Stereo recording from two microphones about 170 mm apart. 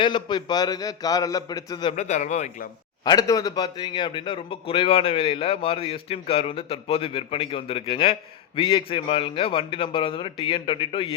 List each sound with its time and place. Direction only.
0.0 s a man's voice: 25° left (ahead or behind); by 2.6 s 45° left (ahead or behind)
3.0 s a man's voice: 20° left (ahead or behind)